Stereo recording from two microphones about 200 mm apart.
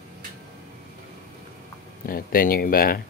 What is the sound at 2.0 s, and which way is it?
Speech, 45° left (ahead or behind).